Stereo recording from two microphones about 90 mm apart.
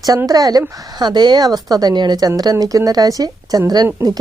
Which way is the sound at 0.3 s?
45° right (ahead or behind).